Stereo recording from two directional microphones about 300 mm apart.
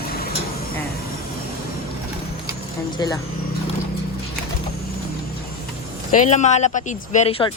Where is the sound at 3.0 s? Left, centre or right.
Centre.